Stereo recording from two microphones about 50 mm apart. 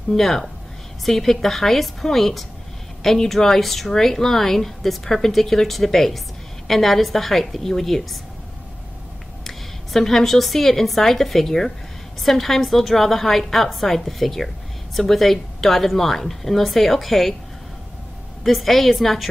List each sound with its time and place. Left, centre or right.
0.1 s speech: centre
9.4 s a woman's voice: centre
18.4 s speech: centre